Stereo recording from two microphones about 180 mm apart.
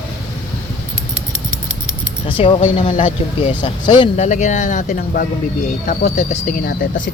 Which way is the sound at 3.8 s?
30° left (ahead or behind).